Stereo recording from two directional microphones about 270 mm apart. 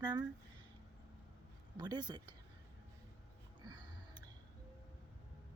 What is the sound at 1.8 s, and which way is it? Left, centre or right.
Speech, centre.